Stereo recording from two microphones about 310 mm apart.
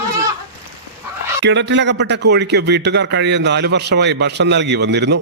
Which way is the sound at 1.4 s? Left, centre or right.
Right.